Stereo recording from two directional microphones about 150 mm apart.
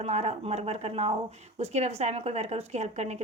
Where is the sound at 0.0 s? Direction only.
45° right (ahead or behind).